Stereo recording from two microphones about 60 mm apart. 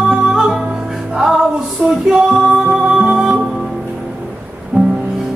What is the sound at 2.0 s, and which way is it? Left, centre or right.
Music, centre.